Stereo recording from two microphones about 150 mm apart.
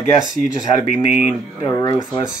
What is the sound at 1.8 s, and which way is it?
Speech, 30° left (ahead or behind).